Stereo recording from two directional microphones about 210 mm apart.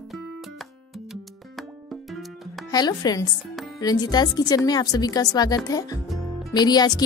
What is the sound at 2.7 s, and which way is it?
A woman's voice, 20° left (ahead or behind).